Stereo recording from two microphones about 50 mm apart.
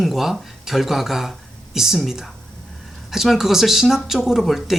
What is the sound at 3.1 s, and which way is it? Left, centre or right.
Speech, centre.